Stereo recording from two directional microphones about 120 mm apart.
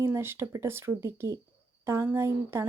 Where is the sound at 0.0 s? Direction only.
20° right (ahead or behind).